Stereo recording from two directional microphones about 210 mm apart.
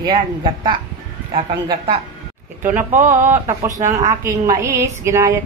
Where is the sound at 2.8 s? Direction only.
35° right (ahead or behind).